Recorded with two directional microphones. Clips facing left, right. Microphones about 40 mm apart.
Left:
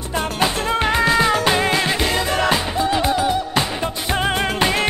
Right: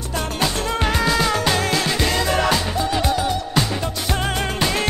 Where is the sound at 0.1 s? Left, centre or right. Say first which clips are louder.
Left 3 dB; left.